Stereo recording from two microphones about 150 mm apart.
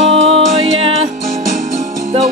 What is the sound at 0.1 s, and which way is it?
Music, 40° right (ahead or behind).